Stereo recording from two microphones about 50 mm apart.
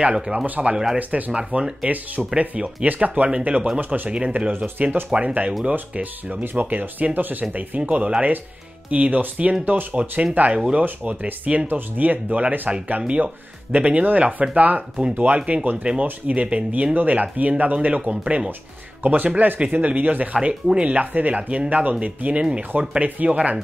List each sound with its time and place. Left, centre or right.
0.0 s speech: centre
0.9 s speech: right
1.3 s speech: centre
1.9 s speech: right; by 4.1 s centre
4.4 s speech: right
4.8 s speech: right
6.4 s speech: right
14.8 s speech: centre
15.1 s speech: right